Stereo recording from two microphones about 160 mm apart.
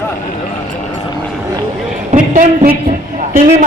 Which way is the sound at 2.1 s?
55° right (ahead or behind).